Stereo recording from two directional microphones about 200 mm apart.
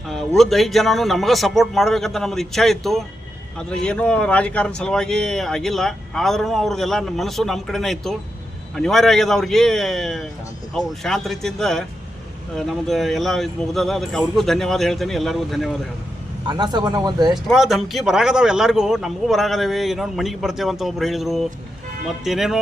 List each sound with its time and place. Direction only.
0.1 s speech: centre (ahead or behind)
16.5 s speech: 20° right (ahead or behind)
17.5 s speech: centre (ahead or behind)